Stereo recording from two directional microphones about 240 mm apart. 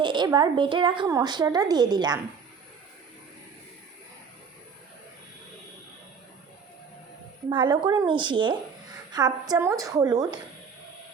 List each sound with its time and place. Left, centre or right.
0.0 s a woman's voice: centre
7.5 s a woman's voice: centre